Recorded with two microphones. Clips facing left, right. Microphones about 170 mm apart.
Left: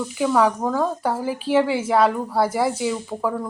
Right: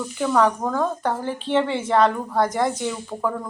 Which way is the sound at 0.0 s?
10° left (ahead or behind).